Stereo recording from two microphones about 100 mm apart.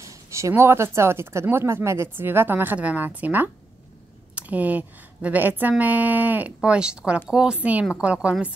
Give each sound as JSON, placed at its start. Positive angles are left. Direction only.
{"t": 0.0, "sound": "speech", "side_deg": -30}